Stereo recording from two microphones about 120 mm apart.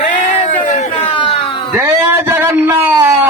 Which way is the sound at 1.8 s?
25° right (ahead or behind).